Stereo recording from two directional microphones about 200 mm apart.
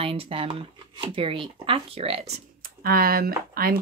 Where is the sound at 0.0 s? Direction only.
30° right (ahead or behind).